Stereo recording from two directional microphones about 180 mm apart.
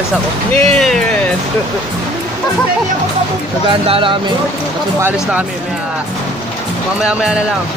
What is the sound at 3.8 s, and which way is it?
Speech, 30° right (ahead or behind).